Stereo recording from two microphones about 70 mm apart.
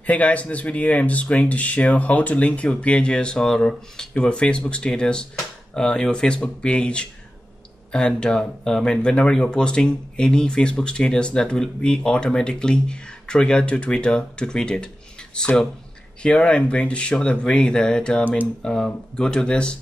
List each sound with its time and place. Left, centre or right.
0.0 s speech: left